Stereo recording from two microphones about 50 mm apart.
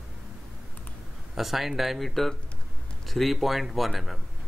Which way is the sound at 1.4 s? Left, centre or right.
Centre.